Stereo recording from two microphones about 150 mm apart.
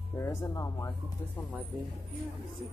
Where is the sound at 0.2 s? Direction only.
20° left (ahead or behind).